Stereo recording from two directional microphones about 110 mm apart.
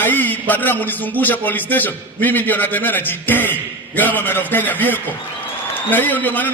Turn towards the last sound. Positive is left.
turn(degrees=15)  # may be behind; listen again after turning